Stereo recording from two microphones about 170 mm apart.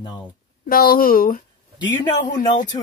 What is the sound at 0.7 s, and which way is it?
Speech, 60° left (ahead or behind).